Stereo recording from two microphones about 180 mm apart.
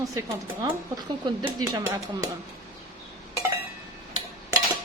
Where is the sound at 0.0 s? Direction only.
20° right (ahead or behind).